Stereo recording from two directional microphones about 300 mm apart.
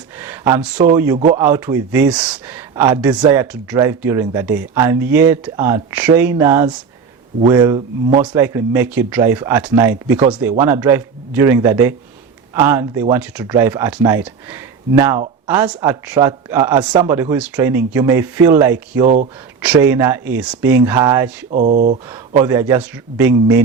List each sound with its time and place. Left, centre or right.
0.2 s a sound: centre
0.9 s speech: centre
19.0 s speech: right
19.6 s speech: centre
21.5 s speech: right
22.1 s speech: centre